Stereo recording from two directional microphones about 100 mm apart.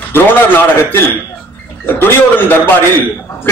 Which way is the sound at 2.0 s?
20° left (ahead or behind).